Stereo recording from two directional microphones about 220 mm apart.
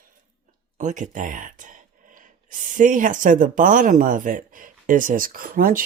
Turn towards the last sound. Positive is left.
turn(degrees=-40)  # may be behind; listen again after turning